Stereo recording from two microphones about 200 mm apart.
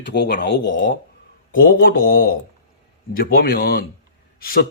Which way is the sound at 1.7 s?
45° left (ahead or behind).